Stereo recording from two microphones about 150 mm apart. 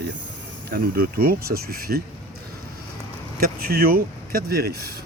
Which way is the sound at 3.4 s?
90° right.